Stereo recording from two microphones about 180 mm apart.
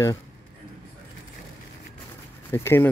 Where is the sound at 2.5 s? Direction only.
15° left (ahead or behind).